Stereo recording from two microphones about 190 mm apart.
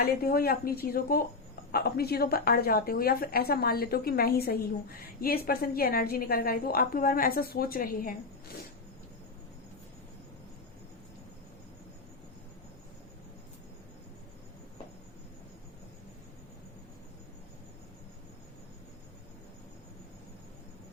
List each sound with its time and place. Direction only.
0.0 s a woman's voice: 50° left (ahead or behind)